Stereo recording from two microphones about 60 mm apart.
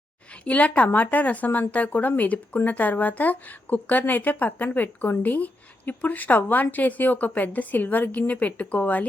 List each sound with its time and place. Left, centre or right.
0.4 s a woman's voice: left